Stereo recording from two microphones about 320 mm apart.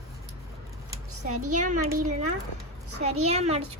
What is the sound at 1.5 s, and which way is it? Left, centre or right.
Speech, right.